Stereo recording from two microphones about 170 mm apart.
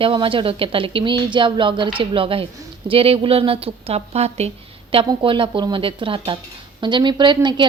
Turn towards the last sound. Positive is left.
turn(degrees=-25)  # may be behind; listen again after turning